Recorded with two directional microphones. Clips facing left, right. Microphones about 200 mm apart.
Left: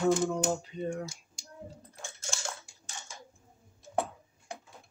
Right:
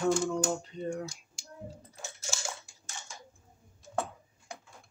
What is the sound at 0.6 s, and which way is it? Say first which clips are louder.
Speech: left 1 dB; 5° left (ahead or behind).